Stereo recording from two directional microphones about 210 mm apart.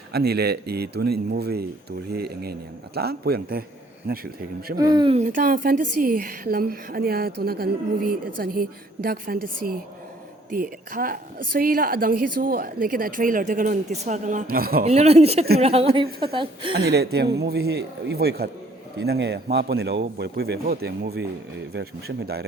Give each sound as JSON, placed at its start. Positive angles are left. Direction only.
{"t": 0.1, "sound": "a woman's voice", "side_deg": -50}
{"t": 4.8, "sound": "speech", "side_deg": -20}
{"t": 5.2, "sound": "a woman's voice", "side_deg": -40}
{"t": 14.8, "sound": "speech", "side_deg": -30}
{"t": 16.7, "sound": "a woman's voice", "side_deg": -50}